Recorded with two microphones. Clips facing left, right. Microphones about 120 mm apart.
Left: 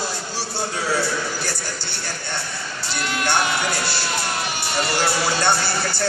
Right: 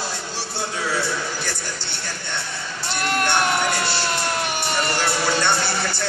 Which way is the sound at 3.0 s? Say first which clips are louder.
Right 3 dB; 50° right (ahead or behind).